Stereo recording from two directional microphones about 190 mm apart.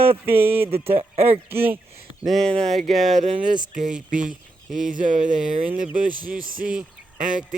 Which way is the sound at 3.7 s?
45° right (ahead or behind).